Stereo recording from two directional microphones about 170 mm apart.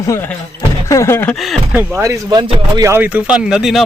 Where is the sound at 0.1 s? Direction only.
15° left (ahead or behind).